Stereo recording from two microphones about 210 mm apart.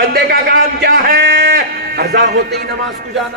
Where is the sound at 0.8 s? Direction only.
45° right (ahead or behind).